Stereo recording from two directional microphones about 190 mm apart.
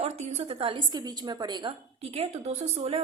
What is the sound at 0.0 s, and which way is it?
A woman's voice, 35° right (ahead or behind).